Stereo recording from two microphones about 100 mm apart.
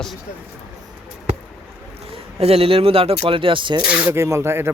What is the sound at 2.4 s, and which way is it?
Speech, 75° right (ahead or behind).